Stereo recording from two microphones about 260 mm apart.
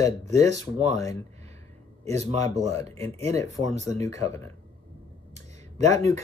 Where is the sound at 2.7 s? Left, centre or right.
Centre.